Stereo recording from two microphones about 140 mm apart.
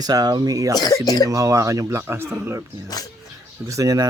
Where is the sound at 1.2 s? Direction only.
25° right (ahead or behind).